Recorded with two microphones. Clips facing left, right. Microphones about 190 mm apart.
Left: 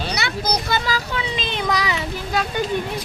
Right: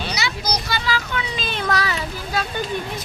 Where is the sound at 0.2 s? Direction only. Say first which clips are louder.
Left 2 dB; 55° left (ahead or behind).